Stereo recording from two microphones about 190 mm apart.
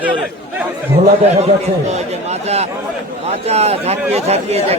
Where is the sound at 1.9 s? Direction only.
35° right (ahead or behind).